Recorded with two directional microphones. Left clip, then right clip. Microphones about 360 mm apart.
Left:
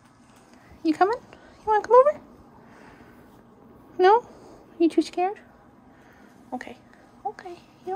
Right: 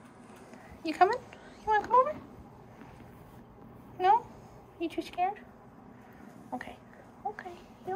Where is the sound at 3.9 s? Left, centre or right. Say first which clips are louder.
Left 7 dB; centre.